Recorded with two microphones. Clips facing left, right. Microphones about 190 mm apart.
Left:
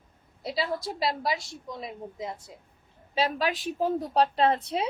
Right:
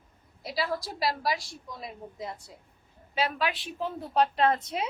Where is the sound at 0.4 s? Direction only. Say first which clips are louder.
Left 2 dB; 25° left (ahead or behind).